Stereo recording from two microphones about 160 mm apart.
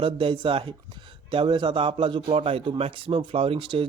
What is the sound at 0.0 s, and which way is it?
A man's voice, 35° right (ahead or behind).